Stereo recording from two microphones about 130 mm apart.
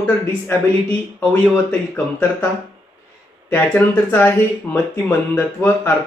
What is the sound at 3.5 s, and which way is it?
Speech, 15° left (ahead or behind).